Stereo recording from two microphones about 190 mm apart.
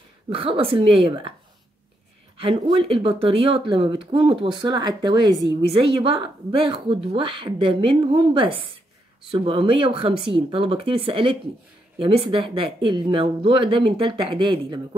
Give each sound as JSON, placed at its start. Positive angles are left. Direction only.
{"t": 0.3, "sound": "speech", "side_deg": -30}
{"t": 2.3, "sound": "speech", "side_deg": -25}